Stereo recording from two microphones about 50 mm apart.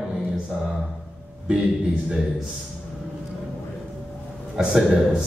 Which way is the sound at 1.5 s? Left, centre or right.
Right.